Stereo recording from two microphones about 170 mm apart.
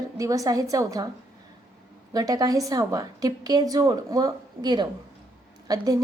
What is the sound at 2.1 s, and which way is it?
A woman's voice, 20° right (ahead or behind).